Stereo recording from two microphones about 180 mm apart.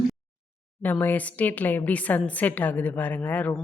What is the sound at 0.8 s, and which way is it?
A woman's voice, 10° left (ahead or behind).